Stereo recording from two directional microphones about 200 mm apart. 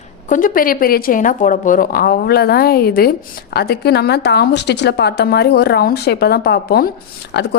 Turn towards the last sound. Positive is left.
turn(degrees=60)  # may be behind; listen again after turning